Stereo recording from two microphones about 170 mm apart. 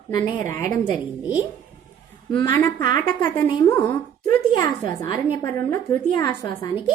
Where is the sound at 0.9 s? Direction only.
10° right (ahead or behind).